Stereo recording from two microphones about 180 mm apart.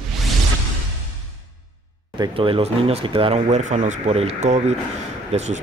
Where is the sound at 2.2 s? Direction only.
30° right (ahead or behind).